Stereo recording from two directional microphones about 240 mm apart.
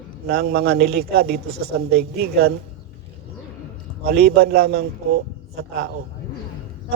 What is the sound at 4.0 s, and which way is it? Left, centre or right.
Speech, right.